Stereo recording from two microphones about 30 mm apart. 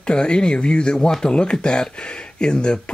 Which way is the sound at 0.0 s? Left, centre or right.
Left.